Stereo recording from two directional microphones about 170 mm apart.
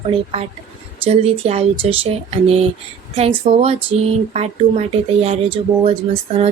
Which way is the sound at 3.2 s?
35° right (ahead or behind).